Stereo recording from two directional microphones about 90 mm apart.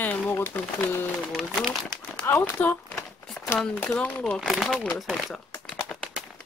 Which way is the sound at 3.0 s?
5° left (ahead or behind).